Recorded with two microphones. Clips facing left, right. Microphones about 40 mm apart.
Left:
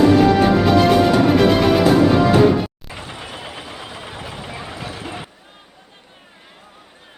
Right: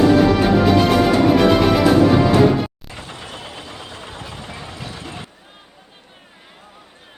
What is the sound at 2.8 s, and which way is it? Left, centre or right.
Vehicle, centre.